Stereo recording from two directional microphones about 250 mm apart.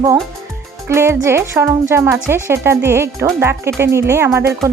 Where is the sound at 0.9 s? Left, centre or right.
Centre.